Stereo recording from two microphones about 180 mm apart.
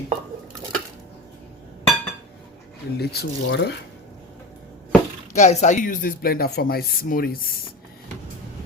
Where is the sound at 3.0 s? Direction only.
60° left (ahead or behind).